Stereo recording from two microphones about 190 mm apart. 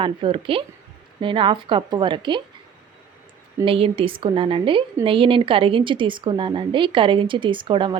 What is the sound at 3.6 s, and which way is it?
Speech, 30° right (ahead or behind).